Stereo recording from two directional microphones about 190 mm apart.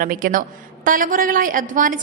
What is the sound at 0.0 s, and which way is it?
A woman's voice, 45° right (ahead or behind).